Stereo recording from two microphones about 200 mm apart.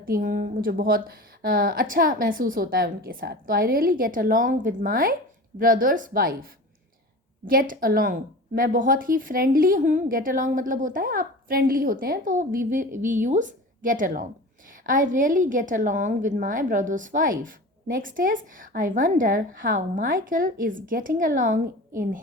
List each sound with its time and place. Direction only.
0.0 s a woman's voice: 45° right (ahead or behind)
7.4 s a woman's voice: 45° right (ahead or behind)